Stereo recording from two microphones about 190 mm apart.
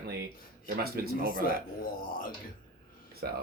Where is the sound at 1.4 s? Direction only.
50° left (ahead or behind).